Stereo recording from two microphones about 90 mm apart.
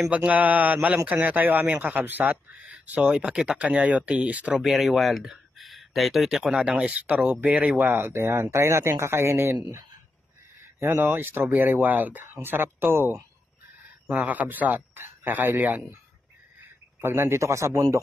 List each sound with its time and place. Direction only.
0.0 s speech: 15° right (ahead or behind)
4.6 s speech: 5° right (ahead or behind); by 9.6 s 30° right (ahead or behind)
10.6 s speech: 25° right (ahead or behind)
17.0 s a man's voice: 25° right (ahead or behind)